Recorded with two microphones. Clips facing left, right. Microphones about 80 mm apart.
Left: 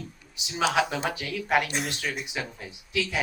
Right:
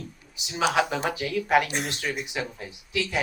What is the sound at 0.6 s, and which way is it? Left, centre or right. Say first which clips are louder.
Speech: right 1 dB; centre.